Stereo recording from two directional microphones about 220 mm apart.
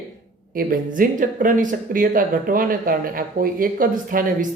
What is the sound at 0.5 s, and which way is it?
Speech, 40° right (ahead or behind).